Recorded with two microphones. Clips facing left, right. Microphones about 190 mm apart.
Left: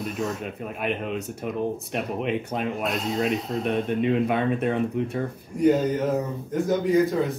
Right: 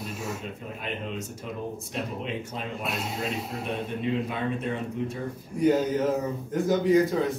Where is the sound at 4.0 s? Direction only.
60° left (ahead or behind).